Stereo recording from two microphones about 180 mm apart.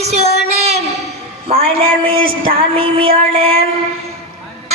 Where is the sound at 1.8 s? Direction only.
30° right (ahead or behind).